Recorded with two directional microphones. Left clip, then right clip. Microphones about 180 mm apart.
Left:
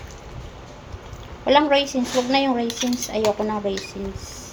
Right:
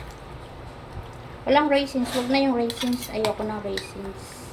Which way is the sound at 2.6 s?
10° left (ahead or behind).